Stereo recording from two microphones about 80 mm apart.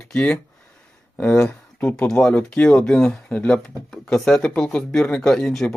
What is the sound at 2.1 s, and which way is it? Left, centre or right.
Speech, centre.